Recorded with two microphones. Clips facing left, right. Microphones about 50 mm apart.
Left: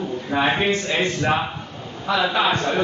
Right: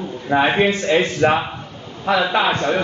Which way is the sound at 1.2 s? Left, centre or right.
Right.